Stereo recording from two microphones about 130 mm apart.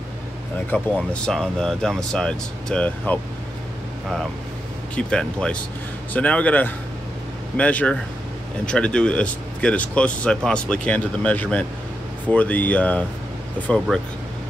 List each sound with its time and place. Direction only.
0.9 s speech: 5° left (ahead or behind)
4.9 s speech: 10° left (ahead or behind)